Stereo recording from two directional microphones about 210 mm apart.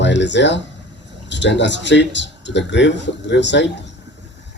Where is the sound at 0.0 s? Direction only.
55° left (ahead or behind).